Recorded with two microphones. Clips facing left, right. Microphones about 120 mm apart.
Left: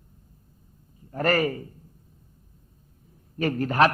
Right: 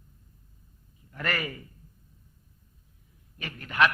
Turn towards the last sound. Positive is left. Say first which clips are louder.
# left 6 dB
turn(degrees=40)  # may be behind; listen again after turning